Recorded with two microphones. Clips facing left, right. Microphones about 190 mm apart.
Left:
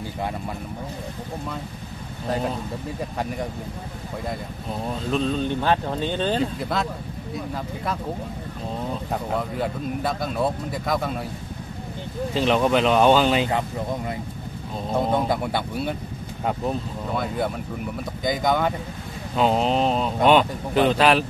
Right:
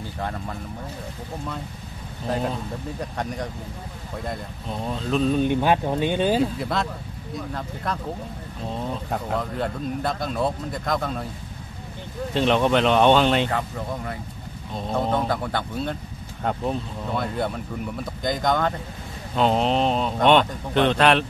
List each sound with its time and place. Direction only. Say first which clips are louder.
2.2 s speech: even; centre (ahead or behind)
5.3 s speech: right 2 dB; 15° right (ahead or behind); by 11.2 s 5° left (ahead or behind)
12.4 s speech: even; centre (ahead or behind)
13.5 s speech: left 2 dB; 20° left (ahead or behind); by 21.3 s 5° left (ahead or behind)